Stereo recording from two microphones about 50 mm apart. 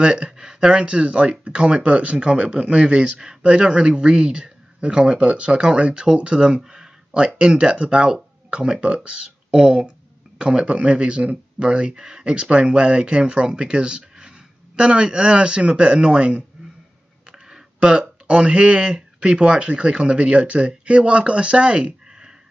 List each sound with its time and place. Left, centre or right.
0.0 s speech: centre